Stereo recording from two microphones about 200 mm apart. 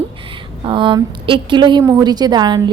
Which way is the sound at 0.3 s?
25° right (ahead or behind).